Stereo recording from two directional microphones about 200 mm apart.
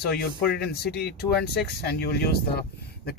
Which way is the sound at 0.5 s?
50° left (ahead or behind).